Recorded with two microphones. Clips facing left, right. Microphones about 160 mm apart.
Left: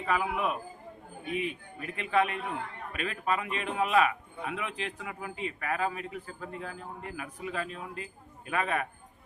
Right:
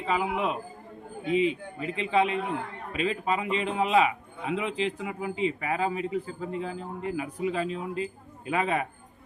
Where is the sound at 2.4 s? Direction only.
20° right (ahead or behind).